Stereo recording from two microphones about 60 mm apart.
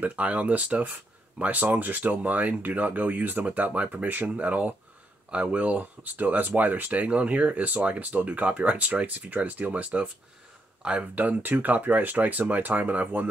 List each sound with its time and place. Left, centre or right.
0.0 s speech: right